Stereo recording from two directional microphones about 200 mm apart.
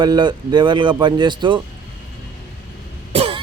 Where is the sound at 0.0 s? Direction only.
20° right (ahead or behind).